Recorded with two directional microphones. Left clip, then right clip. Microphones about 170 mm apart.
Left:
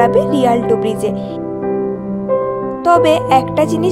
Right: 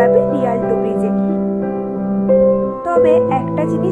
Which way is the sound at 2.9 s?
45° left (ahead or behind).